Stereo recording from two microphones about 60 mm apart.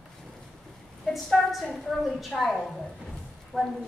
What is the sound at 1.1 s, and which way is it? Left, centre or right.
A woman's voice, centre.